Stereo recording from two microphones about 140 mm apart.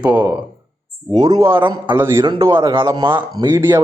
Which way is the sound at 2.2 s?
35° right (ahead or behind).